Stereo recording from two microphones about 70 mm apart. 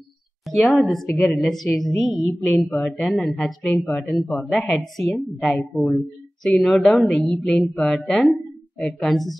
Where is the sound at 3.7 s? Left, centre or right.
Left.